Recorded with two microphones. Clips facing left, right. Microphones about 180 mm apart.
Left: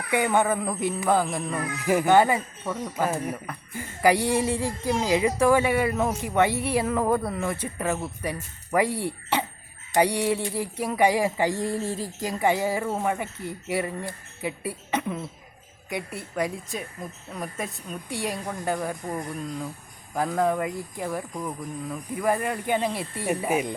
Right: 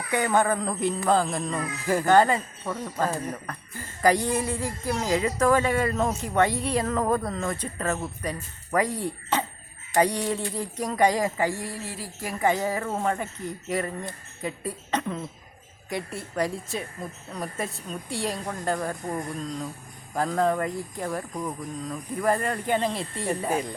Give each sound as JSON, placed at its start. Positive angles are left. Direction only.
{"t": 0.1, "sound": "speech", "side_deg": 10}
{"t": 12.2, "sound": "speech", "side_deg": 15}
{"t": 17.7, "sound": "a woman's voice", "side_deg": 20}
{"t": 18.2, "sound": "speech", "side_deg": 5}